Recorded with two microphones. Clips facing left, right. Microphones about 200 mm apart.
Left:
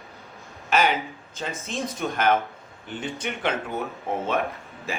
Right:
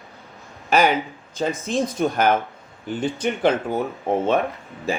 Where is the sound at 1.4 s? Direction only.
35° right (ahead or behind).